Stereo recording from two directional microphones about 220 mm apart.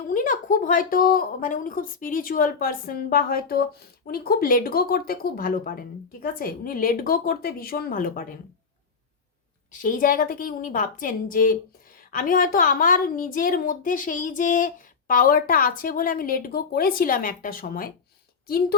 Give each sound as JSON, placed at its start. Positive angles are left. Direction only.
{"t": 0.1, "sound": "a woman's voice", "side_deg": 35}
{"t": 9.8, "sound": "a woman's voice", "side_deg": 40}